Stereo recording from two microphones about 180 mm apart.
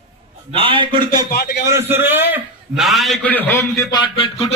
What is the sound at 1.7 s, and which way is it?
Speech, 15° right (ahead or behind).